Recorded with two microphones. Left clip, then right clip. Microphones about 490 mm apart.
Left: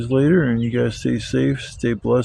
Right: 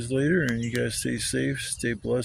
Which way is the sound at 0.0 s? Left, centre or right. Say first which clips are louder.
Left 7 dB; right.